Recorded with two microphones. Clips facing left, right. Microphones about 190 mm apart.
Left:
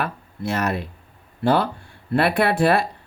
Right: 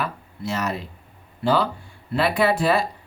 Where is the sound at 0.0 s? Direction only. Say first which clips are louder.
Left 2 dB; 60° left (ahead or behind).